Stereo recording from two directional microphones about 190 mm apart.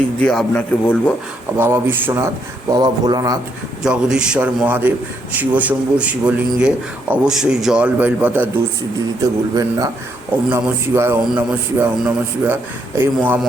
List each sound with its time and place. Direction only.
0.2 s a man's voice: 5° left (ahead or behind)
1.5 s a man's voice: 10° right (ahead or behind)
3.8 s a man's voice: 5° right (ahead or behind)
9.6 s a man's voice: 20° right (ahead or behind)